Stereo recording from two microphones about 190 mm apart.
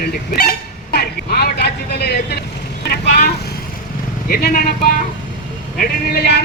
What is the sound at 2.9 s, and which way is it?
Vehicle, 55° left (ahead or behind).